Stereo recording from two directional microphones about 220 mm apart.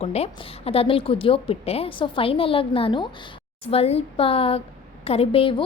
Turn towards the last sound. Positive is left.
turn(degrees=25)  # may be behind; listen again after turning